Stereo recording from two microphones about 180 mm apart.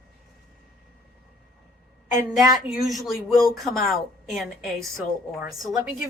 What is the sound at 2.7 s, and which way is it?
A woman's voice, centre (ahead or behind).